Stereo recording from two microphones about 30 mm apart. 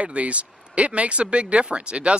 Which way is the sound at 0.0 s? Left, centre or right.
Right.